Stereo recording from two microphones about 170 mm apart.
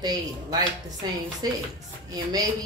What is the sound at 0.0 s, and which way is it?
A woman's voice, 25° right (ahead or behind).